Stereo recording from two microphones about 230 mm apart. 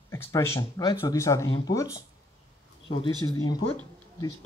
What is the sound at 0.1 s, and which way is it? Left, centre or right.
Speech, centre.